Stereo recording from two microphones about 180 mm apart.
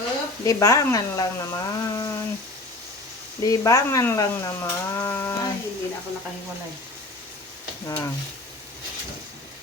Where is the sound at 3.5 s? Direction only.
20° left (ahead or behind).